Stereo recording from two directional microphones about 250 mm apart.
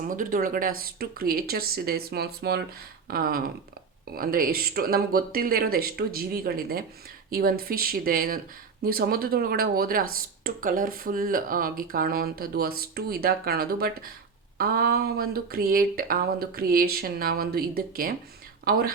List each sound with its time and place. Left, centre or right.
0.0 s speech: right